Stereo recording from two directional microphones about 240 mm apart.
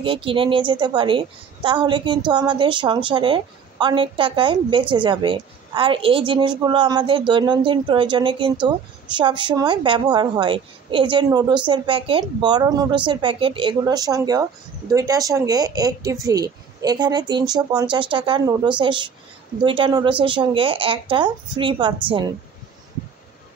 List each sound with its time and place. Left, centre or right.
0.0 s a woman's voice: right